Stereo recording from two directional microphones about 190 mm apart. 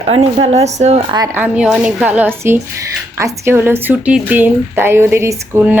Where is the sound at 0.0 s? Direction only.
30° right (ahead or behind).